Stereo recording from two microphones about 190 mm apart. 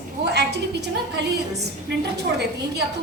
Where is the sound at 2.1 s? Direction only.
60° right (ahead or behind).